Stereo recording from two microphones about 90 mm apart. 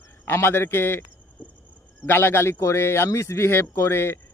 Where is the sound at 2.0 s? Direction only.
25° left (ahead or behind).